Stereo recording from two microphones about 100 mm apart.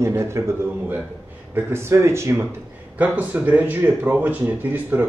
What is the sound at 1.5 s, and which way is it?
Speech, 25° right (ahead or behind).